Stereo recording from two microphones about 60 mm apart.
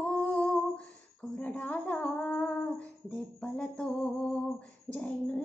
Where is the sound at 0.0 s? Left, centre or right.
Centre.